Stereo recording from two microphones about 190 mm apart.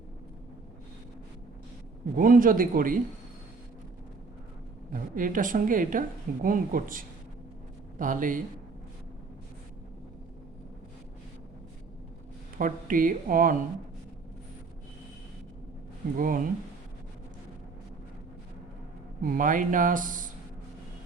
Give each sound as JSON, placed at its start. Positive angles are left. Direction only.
{"t": 2.1, "sound": "a woman's voice", "side_deg": -45}
{"t": 4.9, "sound": "a woman's voice", "side_deg": -45}
{"t": 12.5, "sound": "a woman's voice", "side_deg": -45}
{"t": 16.1, "sound": "a woman's voice", "side_deg": -45}
{"t": 19.2, "sound": "a woman's voice", "side_deg": -45}